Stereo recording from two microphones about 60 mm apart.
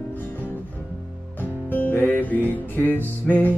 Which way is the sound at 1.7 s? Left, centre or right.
Left.